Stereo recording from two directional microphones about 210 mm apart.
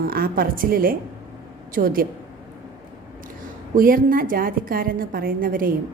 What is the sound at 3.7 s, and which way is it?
A woman's voice, 40° right (ahead or behind).